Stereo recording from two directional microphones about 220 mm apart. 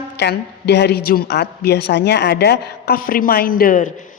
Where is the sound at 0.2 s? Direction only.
50° left (ahead or behind).